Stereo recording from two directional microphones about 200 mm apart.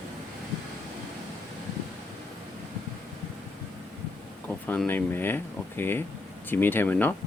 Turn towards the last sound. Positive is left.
turn(degrees=10)  # may be behind; listen again after turning